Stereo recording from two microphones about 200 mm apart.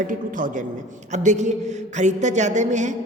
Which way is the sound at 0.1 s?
40° right (ahead or behind).